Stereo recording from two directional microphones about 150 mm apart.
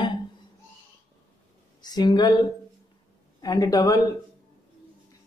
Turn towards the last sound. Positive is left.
turn(degrees=25)  # may be behind; listen again after turning